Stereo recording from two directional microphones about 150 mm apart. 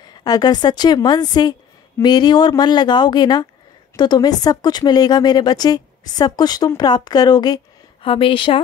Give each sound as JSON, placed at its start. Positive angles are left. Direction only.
{"t": 0.2, "sound": "a woman's voice", "side_deg": 25}